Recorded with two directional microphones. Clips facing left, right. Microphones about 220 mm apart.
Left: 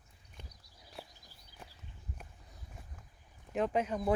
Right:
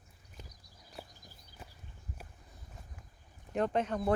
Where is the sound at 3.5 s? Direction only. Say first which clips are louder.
Right 1 dB; 5° left (ahead or behind).